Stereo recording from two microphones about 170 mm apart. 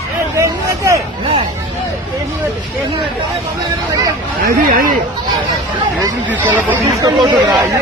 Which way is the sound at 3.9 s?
20° right (ahead or behind).